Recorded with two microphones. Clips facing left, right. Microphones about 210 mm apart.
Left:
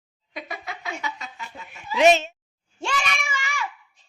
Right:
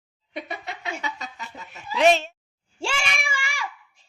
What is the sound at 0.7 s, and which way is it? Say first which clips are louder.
Snicker: left 1 dB; 30° right (ahead or behind).